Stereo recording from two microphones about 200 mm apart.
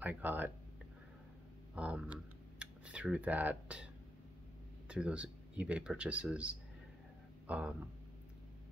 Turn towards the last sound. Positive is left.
turn(degrees=-5)  # may be behind; listen again after turning